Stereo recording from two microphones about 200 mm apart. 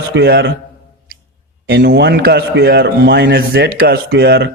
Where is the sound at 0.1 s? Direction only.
55° right (ahead or behind).